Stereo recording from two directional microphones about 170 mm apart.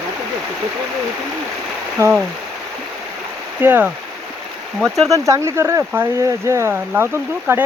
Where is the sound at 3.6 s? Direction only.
10° right (ahead or behind).